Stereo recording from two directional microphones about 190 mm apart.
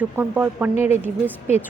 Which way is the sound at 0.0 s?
10° right (ahead or behind).